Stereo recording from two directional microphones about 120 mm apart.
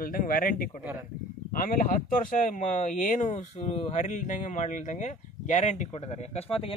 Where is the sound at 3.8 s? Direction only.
70° left (ahead or behind).